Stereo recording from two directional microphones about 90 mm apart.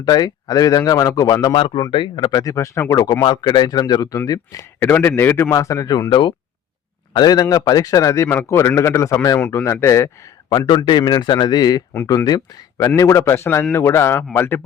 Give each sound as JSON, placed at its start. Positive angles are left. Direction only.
{"t": 0.0, "sound": "speech", "side_deg": 50}
{"t": 1.5, "sound": "speech", "side_deg": 70}
{"t": 2.3, "sound": "a man's voice", "side_deg": 40}
{"t": 4.9, "sound": "a man's voice", "side_deg": 25}
{"t": 6.1, "sound": "speech", "side_deg": 60}
{"t": 7.1, "sound": "a man's voice", "side_deg": 50}
{"t": 10.8, "sound": "speech", "side_deg": 55}
{"t": 13.0, "sound": "a man's voice", "side_deg": 35}